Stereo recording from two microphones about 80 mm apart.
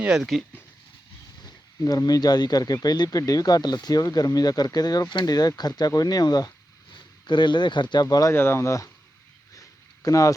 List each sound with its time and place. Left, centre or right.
0.0 s speech: centre
1.8 s speech: left
6.9 s speech: left
8.0 s speech: left
8.3 s speech: left
9.6 s a sound: left